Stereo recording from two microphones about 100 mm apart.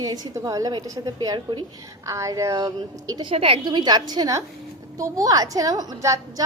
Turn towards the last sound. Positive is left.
turn(degrees=-35)  # may be behind; listen again after turning